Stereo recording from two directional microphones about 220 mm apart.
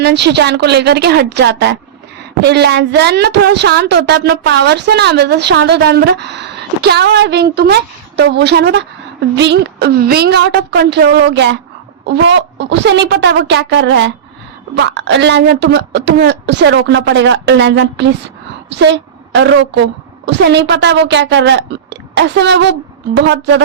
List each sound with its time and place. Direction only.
0.0 s a woman's voice: 50° right (ahead or behind)